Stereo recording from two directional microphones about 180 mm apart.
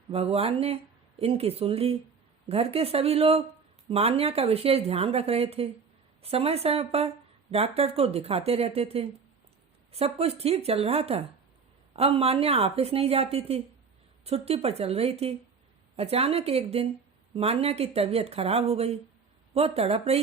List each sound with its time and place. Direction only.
0.1 s speech: 35° right (ahead or behind)